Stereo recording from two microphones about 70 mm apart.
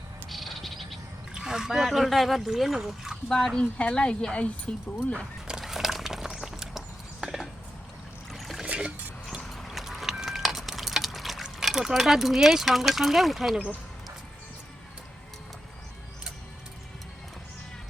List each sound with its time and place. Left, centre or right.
0.3 s bird: centre
1.3 s speech: centre
3.2 s speech: centre
5.5 s a sound: centre
8.6 s boat: centre
9.4 s a sound: centre
11.4 s speech: centre